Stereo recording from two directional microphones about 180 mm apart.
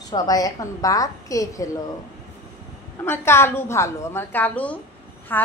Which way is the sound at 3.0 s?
15° left (ahead or behind).